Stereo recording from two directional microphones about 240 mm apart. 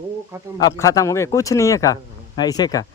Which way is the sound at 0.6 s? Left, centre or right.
Centre.